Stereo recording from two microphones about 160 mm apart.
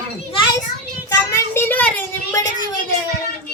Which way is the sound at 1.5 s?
10° left (ahead or behind).